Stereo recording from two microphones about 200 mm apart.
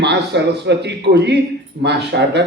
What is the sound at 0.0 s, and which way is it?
A man's voice, 60° right (ahead or behind).